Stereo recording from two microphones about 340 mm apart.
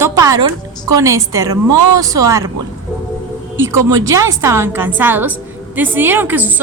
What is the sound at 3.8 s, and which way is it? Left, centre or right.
Speech, right.